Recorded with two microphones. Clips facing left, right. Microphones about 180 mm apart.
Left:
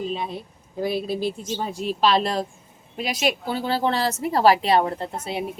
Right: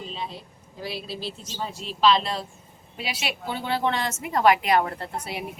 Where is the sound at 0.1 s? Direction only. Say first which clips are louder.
Left 6 dB; 55° left (ahead or behind).